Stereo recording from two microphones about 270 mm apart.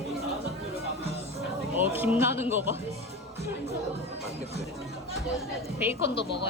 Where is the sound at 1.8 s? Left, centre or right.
Centre.